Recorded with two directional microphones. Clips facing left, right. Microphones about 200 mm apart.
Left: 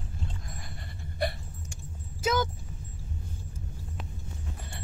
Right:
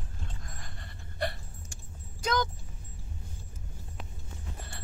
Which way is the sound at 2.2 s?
5° left (ahead or behind).